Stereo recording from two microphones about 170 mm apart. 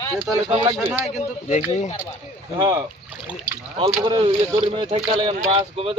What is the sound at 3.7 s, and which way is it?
Speech, 30° right (ahead or behind).